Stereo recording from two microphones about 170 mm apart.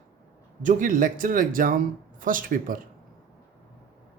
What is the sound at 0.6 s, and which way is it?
Speech, 50° right (ahead or behind).